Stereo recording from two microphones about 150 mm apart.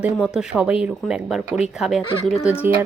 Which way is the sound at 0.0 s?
5° right (ahead or behind).